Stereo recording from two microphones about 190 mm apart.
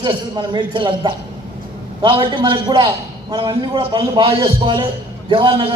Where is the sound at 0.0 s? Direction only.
25° right (ahead or behind).